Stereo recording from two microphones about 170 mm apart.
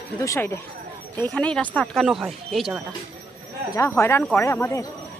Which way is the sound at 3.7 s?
15° left (ahead or behind).